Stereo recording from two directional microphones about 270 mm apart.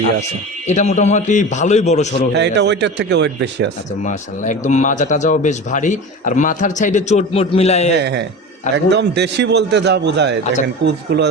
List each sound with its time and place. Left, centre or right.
0.7 s a man's voice: left
2.3 s a man's voice: right
4.0 s a man's voice: left
7.9 s a man's voice: right